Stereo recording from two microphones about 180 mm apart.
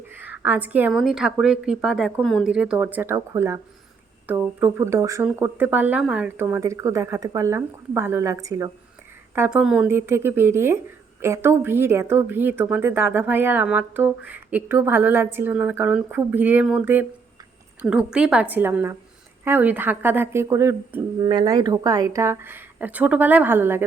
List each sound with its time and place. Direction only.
0.1 s a woman's voice: 10° right (ahead or behind)